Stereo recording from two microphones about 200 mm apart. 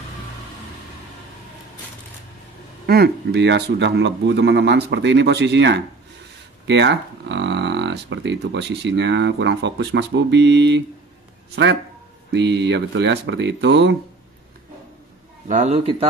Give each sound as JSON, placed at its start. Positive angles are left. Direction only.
{"t": 2.9, "sound": "speech", "side_deg": -55}
{"t": 12.3, "sound": "speech", "side_deg": -60}
{"t": 15.4, "sound": "speech", "side_deg": -35}